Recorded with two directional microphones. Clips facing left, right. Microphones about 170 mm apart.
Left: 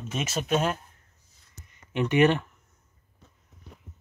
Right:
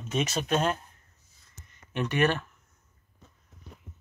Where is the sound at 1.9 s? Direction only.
15° left (ahead or behind).